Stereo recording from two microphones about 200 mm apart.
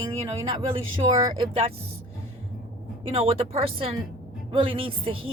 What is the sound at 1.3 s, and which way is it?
Speech, 30° right (ahead or behind).